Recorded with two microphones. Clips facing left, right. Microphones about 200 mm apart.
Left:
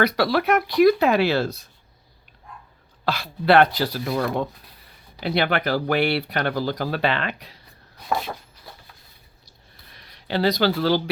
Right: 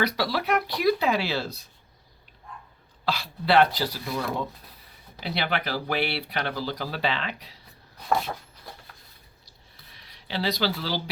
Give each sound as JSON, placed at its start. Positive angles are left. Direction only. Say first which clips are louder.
{"t": 0.0, "sound": "speech", "louder": "left 6 dB", "side_deg": 55}
{"t": 3.1, "sound": "speech", "louder": "left 5 dB", "side_deg": 55}
{"t": 9.9, "sound": "speech", "louder": "left 7 dB", "side_deg": 50}